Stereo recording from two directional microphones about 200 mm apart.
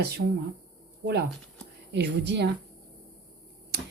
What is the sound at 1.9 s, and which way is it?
Speech, 55° right (ahead or behind).